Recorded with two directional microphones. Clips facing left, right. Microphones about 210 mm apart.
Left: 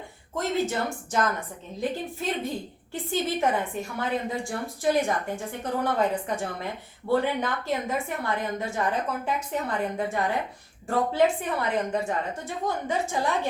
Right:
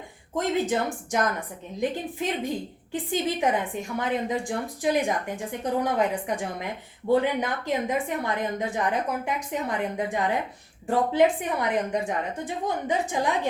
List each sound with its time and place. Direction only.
0.3 s a woman's voice: 15° right (ahead or behind)